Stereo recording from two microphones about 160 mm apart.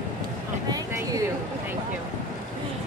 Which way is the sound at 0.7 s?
20° right (ahead or behind).